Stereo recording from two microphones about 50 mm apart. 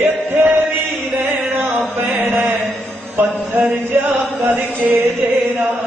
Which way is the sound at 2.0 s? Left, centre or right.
Right.